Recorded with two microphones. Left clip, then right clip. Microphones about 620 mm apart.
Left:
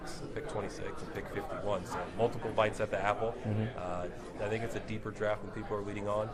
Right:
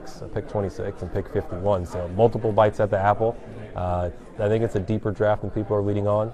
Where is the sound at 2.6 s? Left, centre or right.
Right.